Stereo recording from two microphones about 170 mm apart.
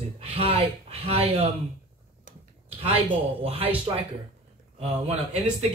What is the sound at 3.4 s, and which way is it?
Speech, 35° right (ahead or behind).